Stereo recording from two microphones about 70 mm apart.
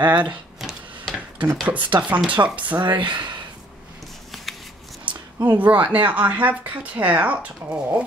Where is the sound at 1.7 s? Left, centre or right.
Right.